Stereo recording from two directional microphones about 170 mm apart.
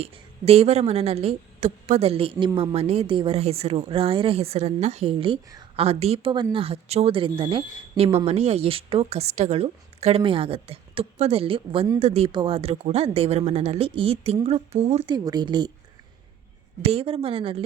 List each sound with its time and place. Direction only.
0.0 s speech: 35° right (ahead or behind)
15.1 s speech: 25° right (ahead or behind)
16.8 s speech: 35° right (ahead or behind)